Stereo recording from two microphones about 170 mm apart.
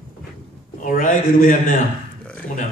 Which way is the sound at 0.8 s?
55° left (ahead or behind).